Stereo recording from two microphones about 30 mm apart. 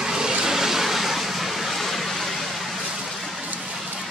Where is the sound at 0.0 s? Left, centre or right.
Right; by 2.2 s centre.